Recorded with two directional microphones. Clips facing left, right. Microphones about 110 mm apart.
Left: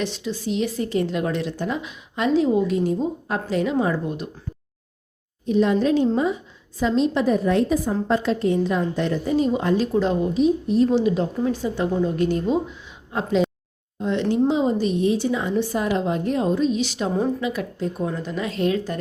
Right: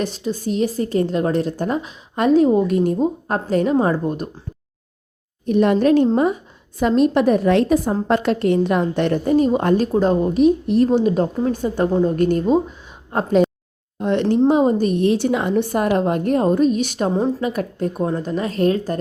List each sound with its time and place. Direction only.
0.0 s a woman's voice: 45° right (ahead or behind)
5.5 s a woman's voice: 60° right (ahead or behind)
8.0 s a woman's voice: 65° right (ahead or behind)
10.8 s a woman's voice: 45° right (ahead or behind)
14.0 s a sound: 60° right (ahead or behind)
14.3 s a woman's voice: 50° right (ahead or behind)
18.0 s a woman's voice: 40° right (ahead or behind)